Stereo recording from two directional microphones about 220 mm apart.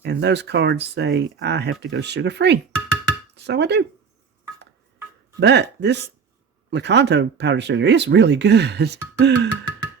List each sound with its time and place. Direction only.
0.0 s speech: 50° right (ahead or behind)
5.4 s speech: 50° right (ahead or behind)